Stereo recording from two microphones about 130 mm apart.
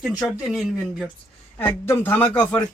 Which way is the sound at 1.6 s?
15° left (ahead or behind).